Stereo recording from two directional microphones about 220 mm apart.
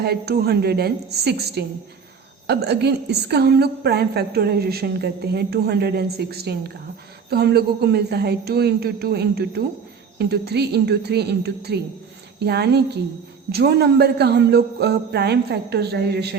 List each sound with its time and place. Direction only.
0.0 s a woman's voice: 45° right (ahead or behind)